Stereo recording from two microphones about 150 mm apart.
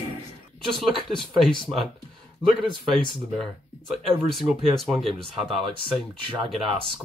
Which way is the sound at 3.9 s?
Centre (ahead or behind).